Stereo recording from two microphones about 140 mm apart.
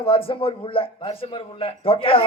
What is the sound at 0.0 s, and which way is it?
A man's voice, 40° left (ahead or behind).